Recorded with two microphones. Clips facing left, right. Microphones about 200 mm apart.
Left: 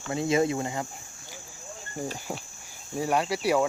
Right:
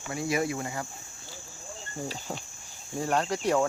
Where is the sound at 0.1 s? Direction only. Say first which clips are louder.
Left 4 dB; 25° left (ahead or behind).